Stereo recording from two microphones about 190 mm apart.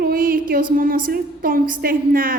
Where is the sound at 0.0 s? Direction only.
50° right (ahead or behind).